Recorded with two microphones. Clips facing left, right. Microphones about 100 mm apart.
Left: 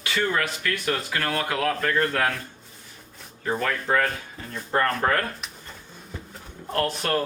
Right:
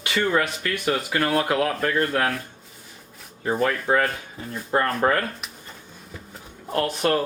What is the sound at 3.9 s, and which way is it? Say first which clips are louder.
Speech: right 2 dB; 15° right (ahead or behind).